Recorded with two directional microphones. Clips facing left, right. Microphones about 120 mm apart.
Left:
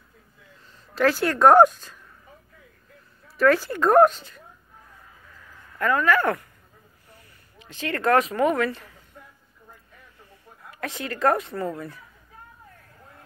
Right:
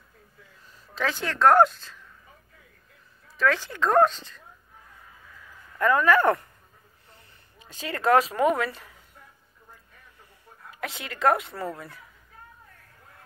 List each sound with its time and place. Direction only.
0.9 s speech: 5° left (ahead or behind)
3.3 s speech: 10° left (ahead or behind)
5.8 s speech: 20° right (ahead or behind)
7.6 s speech: 15° right (ahead or behind)
10.8 s a woman's voice: centre (ahead or behind)